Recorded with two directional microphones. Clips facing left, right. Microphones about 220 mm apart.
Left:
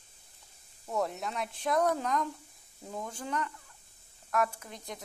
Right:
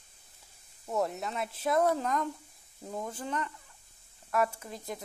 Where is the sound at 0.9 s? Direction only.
Centre (ahead or behind).